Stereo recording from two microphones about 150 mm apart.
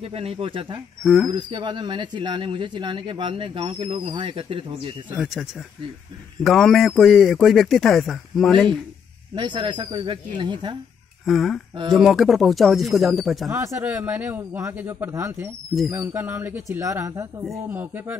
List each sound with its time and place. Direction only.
0.0 s speech: 40° right (ahead or behind)
1.0 s a man's voice: centre (ahead or behind)
1.3 s speech: 30° right (ahead or behind)
5.1 s a man's voice: centre (ahead or behind)
9.3 s speech: 30° right (ahead or behind)
11.2 s a man's voice: centre (ahead or behind)
13.5 s speech: 15° right (ahead or behind)